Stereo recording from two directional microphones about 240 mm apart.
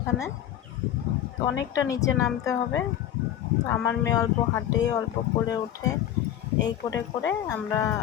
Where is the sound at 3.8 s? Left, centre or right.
Centre.